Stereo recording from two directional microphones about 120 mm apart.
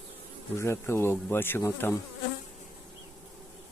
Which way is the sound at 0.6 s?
20° left (ahead or behind).